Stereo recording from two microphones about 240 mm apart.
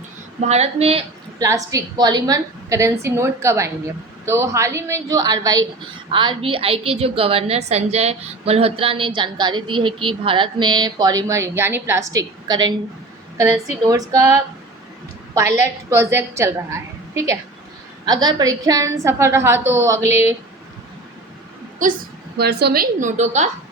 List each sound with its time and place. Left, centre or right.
0.4 s a woman's voice: right
1.5 s a woman's voice: centre
14.1 s a woman's voice: centre
15.4 s a woman's voice: centre
22.4 s a woman's voice: right